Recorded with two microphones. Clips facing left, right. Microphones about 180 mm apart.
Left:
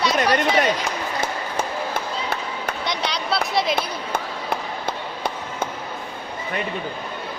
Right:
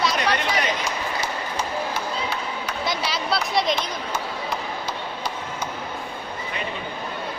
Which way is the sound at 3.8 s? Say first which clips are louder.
Left 2 dB; 55° left (ahead or behind).